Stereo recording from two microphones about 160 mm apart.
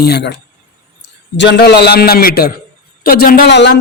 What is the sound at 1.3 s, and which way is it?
A man's voice, 90° left.